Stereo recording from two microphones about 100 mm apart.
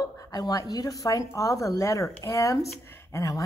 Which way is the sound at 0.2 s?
40° left (ahead or behind).